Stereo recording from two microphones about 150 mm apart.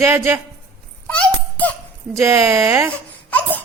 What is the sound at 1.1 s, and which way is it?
Babbling, 10° left (ahead or behind).